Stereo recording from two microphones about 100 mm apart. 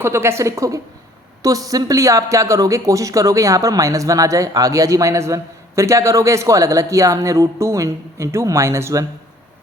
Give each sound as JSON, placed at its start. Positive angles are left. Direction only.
{"t": 0.0, "sound": "a woman's voice", "side_deg": -25}